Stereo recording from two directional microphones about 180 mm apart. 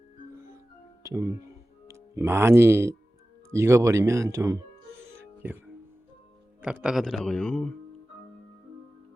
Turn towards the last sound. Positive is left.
turn(degrees=10)  # may be behind; listen again after turning